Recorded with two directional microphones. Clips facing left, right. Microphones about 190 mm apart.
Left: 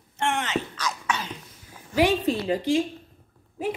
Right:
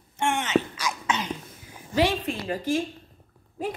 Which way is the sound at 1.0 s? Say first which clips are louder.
Right 2 dB; 20° right (ahead or behind).